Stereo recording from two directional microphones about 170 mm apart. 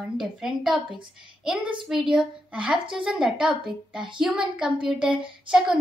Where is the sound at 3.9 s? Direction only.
30° right (ahead or behind).